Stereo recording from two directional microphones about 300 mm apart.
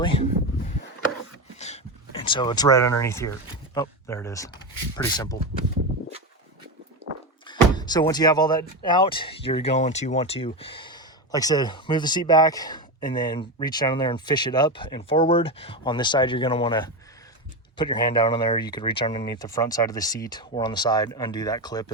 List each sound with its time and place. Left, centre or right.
0.0 s speech: centre
1.5 s speech: left
7.4 s music: centre
8.8 s speech: centre